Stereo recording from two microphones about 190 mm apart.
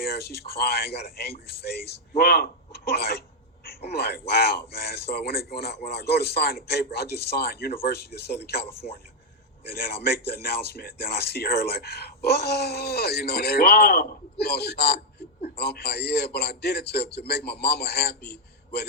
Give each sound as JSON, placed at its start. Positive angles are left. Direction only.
{"t": 0.0, "sound": "a man's voice", "side_deg": 55}